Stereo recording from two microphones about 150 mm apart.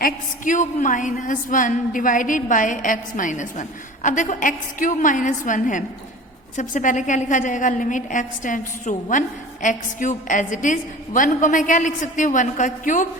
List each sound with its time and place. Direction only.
0.0 s a woman's voice: 60° left (ahead or behind)